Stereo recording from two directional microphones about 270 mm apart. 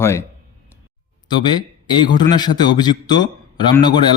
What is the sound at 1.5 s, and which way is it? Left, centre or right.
A man's voice, centre.